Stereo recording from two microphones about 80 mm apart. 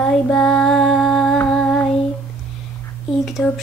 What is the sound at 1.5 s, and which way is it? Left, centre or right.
Child singing, centre.